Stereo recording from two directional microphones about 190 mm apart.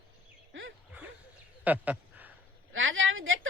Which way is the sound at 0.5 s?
90° right.